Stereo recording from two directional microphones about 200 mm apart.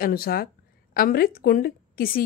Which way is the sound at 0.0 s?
45° left (ahead or behind).